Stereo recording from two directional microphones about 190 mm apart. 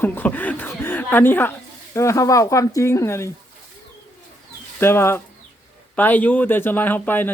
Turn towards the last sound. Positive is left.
turn(degrees=10)  # may be behind; listen again after turning